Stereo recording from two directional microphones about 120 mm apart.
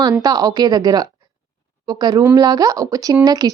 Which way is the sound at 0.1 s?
30° right (ahead or behind).